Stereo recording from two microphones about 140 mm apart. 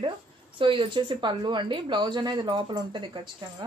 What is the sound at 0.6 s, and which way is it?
Speech, 35° right (ahead or behind).